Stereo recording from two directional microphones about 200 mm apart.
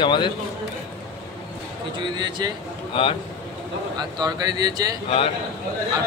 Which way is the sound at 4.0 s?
20° right (ahead or behind).